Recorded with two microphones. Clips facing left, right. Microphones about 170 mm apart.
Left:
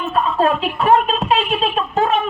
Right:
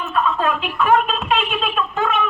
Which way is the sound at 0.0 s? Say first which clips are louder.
Left 3 dB; 35° left (ahead or behind).